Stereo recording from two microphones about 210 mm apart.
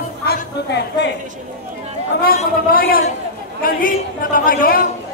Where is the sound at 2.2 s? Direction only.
45° left (ahead or behind).